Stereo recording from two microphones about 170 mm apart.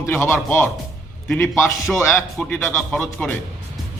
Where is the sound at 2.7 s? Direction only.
Centre (ahead or behind).